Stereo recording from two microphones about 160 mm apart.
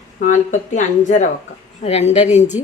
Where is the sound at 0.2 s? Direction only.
50° left (ahead or behind).